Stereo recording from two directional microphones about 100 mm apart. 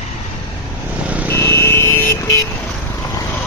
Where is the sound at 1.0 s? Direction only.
15° right (ahead or behind).